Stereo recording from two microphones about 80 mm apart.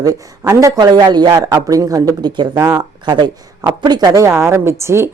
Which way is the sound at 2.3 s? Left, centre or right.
Right.